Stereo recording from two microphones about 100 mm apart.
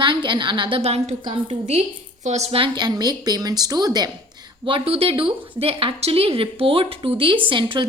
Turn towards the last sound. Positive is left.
turn(degrees=-55)  # may be behind; listen again after turning